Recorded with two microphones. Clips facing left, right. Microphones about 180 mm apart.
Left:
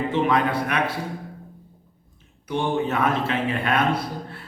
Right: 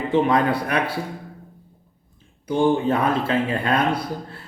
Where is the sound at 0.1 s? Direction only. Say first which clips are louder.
Right 5 dB; 30° right (ahead or behind).